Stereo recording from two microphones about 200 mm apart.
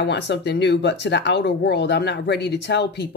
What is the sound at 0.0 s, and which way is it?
Speech, 60° left (ahead or behind).